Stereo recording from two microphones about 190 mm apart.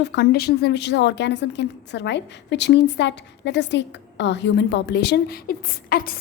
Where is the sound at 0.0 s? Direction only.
60° left (ahead or behind).